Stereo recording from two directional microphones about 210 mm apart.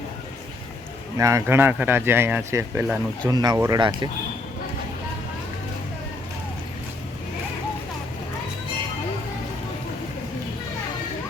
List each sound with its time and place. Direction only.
1.2 s a man's voice: 15° right (ahead or behind)
3.2 s a man's voice: 20° right (ahead or behind)